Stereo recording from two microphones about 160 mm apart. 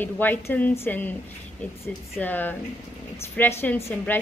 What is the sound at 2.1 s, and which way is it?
A woman's voice, 10° left (ahead or behind).